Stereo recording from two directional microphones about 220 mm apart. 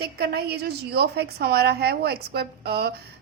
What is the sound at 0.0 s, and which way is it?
A woman's voice, 45° right (ahead or behind).